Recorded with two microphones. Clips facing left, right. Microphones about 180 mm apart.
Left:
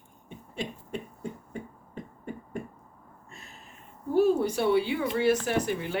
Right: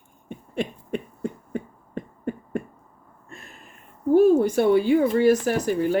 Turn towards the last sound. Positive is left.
turn(degrees=-40)  # may be behind; listen again after turning